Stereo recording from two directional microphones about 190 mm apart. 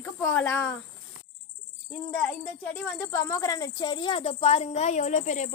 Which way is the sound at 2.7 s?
10° left (ahead or behind).